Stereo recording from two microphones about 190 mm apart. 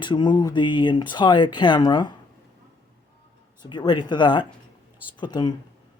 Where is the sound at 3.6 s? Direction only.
20° left (ahead or behind).